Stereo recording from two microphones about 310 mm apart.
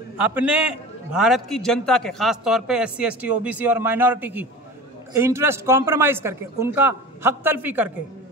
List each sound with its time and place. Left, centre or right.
0.3 s a man's voice: centre